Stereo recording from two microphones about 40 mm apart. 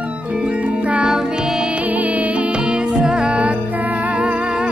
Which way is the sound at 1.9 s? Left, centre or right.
Right.